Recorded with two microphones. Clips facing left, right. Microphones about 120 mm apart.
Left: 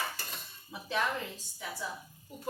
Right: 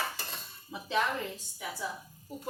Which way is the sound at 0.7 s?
20° right (ahead or behind).